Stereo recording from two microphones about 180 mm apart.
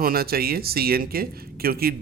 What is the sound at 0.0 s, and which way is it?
Speech, 55° right (ahead or behind).